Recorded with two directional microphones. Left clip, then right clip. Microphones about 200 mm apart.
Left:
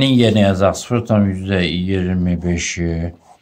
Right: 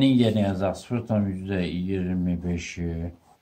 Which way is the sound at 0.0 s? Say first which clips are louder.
Left 8 dB; 35° left (ahead or behind).